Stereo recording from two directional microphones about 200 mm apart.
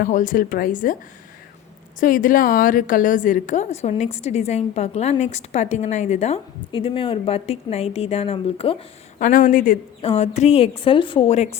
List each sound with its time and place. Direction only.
0.0 s a woman's voice: 40° left (ahead or behind)
2.0 s a woman's voice: 45° left (ahead or behind)